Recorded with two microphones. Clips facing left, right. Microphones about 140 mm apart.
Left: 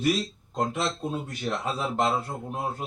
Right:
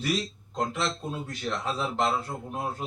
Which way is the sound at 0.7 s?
20° left (ahead or behind).